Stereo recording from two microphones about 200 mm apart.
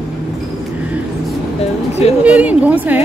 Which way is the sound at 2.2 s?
5° right (ahead or behind).